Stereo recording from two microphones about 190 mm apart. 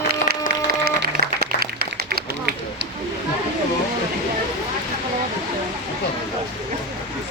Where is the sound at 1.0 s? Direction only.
55° right (ahead or behind).